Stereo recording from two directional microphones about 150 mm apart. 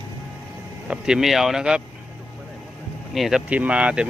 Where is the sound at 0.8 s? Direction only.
5° right (ahead or behind).